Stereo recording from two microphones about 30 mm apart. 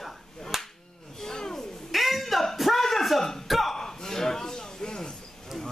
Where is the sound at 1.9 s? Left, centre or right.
Centre.